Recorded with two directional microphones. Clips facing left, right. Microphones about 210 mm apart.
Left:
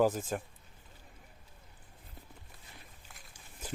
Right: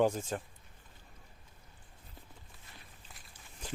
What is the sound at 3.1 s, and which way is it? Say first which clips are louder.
Walk: left 1 dB; 5° left (ahead or behind).